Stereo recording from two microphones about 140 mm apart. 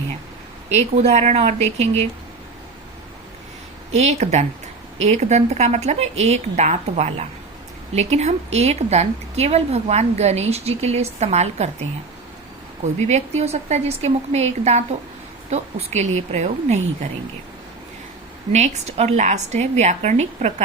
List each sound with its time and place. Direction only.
0.7 s a woman's voice: 50° right (ahead or behind)
3.9 s a woman's voice: 55° right (ahead or behind)
13.0 s a woman's voice: 55° right (ahead or behind)
18.5 s a woman's voice: 55° right (ahead or behind)